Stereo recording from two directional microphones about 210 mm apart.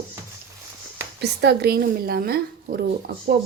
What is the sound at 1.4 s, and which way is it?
Speech, 50° right (ahead or behind).